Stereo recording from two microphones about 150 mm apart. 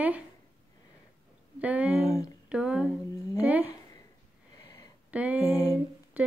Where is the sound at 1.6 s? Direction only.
10° right (ahead or behind).